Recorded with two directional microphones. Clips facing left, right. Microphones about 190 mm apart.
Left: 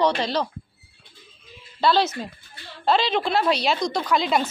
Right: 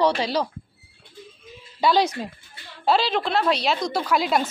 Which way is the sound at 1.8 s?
15° right (ahead or behind).